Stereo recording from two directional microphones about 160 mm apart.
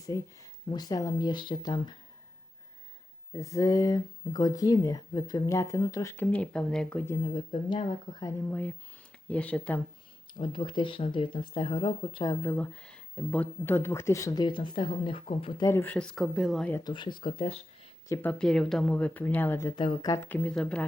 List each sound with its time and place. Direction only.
0.1 s speech: 25° left (ahead or behind)
3.3 s speech: 20° left (ahead or behind)
6.3 s speech: 5° left (ahead or behind)
7.3 s speech: 30° left (ahead or behind); by 9.8 s 10° left (ahead or behind)
10.3 s speech: 30° left (ahead or behind)
12.5 s speech: 10° left (ahead or behind); by 15.6 s 35° left (ahead or behind)
15.6 s speech: 15° left (ahead or behind)
16.8 s speech: 30° left (ahead or behind)
18.1 s speech: 10° left (ahead or behind)
19.7 s speech: 30° left (ahead or behind); by 20.8 s 5° left (ahead or behind)